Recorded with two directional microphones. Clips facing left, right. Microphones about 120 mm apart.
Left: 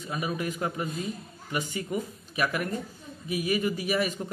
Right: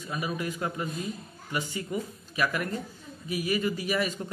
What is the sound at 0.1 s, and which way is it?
Speech, 25° left (ahead or behind).